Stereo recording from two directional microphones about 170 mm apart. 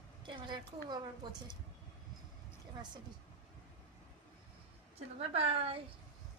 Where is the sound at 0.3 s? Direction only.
25° right (ahead or behind).